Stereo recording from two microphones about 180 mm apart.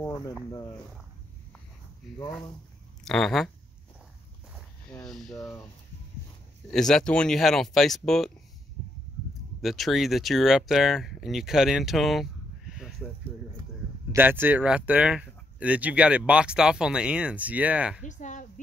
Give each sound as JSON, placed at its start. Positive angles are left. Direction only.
{"t": 3.1, "sound": "speech", "side_deg": 0}
{"t": 5.0, "sound": "speech", "side_deg": 0}
{"t": 6.7, "sound": "speech", "side_deg": 5}
{"t": 9.6, "sound": "speech", "side_deg": 0}
{"t": 14.1, "sound": "speech", "side_deg": -10}
{"t": 18.0, "sound": "a sound", "side_deg": 45}